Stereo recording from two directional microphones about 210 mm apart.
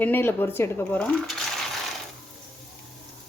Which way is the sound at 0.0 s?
10° left (ahead or behind).